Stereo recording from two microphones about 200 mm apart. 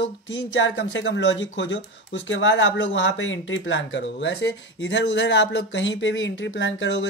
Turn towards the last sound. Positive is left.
turn(degrees=65)  # may be behind; listen again after turning